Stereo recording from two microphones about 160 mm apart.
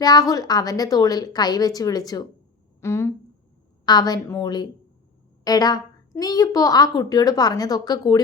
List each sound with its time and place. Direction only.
0.0 s a woman's voice: 25° left (ahead or behind)